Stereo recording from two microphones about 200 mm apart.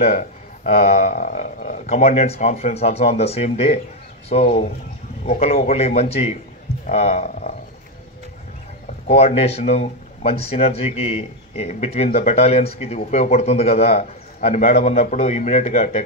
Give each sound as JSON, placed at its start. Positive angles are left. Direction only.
{"t": 0.7, "sound": "speech", "side_deg": 35}
{"t": 9.0, "sound": "speech", "side_deg": 35}